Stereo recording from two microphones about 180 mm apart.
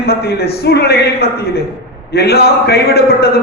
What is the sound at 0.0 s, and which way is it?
A man's voice, 60° left (ahead or behind).